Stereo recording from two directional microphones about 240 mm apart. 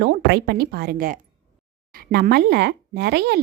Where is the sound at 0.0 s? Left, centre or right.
Right.